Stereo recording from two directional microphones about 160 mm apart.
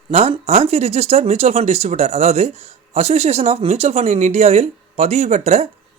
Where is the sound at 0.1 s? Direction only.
40° right (ahead or behind).